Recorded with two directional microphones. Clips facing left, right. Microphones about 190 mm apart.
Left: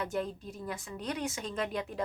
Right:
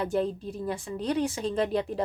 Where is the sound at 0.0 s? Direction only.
30° right (ahead or behind).